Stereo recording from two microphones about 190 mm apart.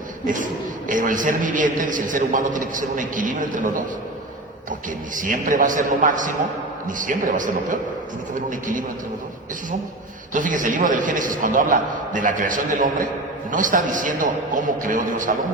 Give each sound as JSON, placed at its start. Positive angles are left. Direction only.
{"t": 0.3, "sound": "a man's voice", "side_deg": -45}
{"t": 5.1, "sound": "a man's voice", "side_deg": -45}
{"t": 10.3, "sound": "a man's voice", "side_deg": -45}